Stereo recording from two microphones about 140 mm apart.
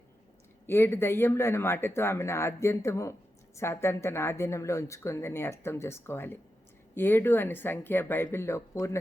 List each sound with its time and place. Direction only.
0.7 s speech: 15° left (ahead or behind)